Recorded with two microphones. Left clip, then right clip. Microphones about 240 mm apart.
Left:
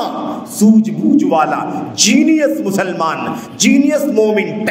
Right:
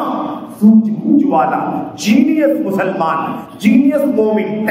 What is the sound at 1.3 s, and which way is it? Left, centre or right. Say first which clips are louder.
Music: even; left.